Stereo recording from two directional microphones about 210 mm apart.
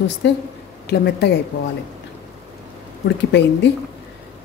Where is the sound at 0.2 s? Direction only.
55° left (ahead or behind).